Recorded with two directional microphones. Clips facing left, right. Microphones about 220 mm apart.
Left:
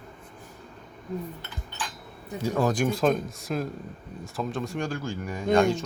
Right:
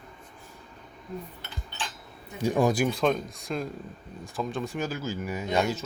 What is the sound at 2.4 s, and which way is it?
Speech, 15° right (ahead or behind).